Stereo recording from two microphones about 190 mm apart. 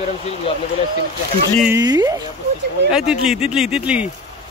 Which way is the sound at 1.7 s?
20° right (ahead or behind).